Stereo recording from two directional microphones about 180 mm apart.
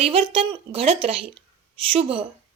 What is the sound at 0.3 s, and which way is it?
A woman's voice, 30° right (ahead or behind).